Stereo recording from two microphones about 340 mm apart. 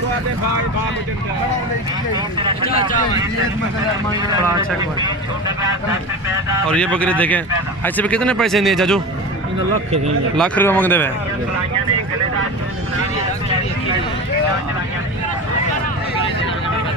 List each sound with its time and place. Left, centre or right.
6.7 s speech: centre
10.3 s speech: centre